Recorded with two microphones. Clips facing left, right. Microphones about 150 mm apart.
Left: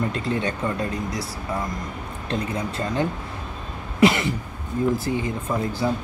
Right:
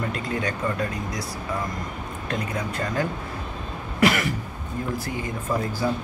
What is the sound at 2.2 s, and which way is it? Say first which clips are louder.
Speech: left 2 dB; 25° left (ahead or behind).